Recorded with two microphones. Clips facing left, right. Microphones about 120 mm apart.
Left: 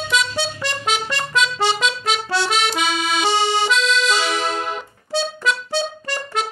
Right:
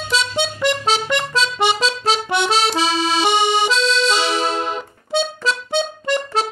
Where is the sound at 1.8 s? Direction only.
30° right (ahead or behind).